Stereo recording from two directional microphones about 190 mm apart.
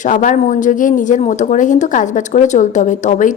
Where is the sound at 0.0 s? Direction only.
40° left (ahead or behind).